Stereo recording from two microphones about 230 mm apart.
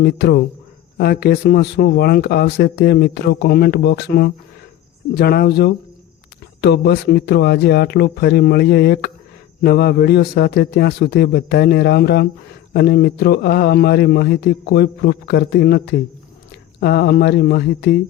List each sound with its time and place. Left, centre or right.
0.0 s speech: left